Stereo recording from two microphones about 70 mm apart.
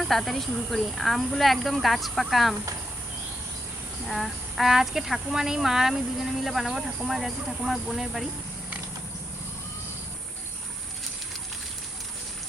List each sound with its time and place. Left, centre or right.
0.0 s speech: centre
4.0 s speech: centre